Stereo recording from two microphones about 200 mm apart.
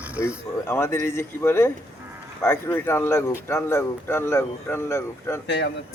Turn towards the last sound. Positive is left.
turn(degrees=60)  # may be behind; listen again after turning